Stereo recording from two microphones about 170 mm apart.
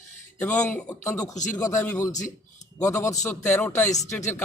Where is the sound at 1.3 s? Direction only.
45° left (ahead or behind).